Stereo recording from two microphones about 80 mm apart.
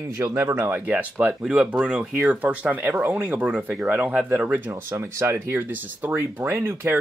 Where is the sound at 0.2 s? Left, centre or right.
Right; by 4.7 s centre.